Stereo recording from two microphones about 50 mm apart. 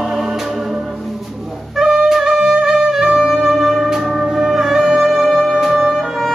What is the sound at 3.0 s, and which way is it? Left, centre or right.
Music, centre.